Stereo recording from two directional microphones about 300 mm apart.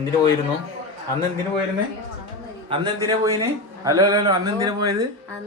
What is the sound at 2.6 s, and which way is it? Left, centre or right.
Speech, centre.